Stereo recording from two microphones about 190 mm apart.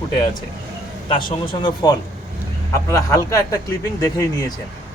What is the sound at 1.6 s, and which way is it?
A man's voice, 20° left (ahead or behind).